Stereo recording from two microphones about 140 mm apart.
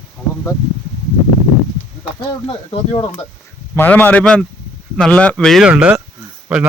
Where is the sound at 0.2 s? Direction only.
5° right (ahead or behind).